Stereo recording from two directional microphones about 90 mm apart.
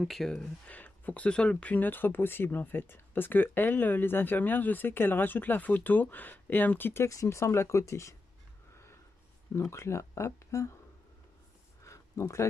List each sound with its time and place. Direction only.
0.0 s speech: centre (ahead or behind); by 8.2 s 35° left (ahead or behind)
9.5 s speech: 30° left (ahead or behind)
11.8 s a sound: 35° left (ahead or behind)